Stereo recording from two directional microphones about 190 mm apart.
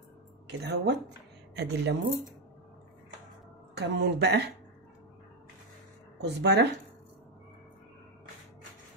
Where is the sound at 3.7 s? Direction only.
60° right (ahead or behind).